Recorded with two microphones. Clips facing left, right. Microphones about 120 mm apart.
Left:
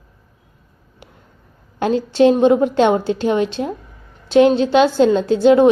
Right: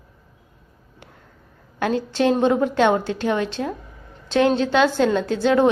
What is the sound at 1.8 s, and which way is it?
A woman's voice, 25° left (ahead or behind).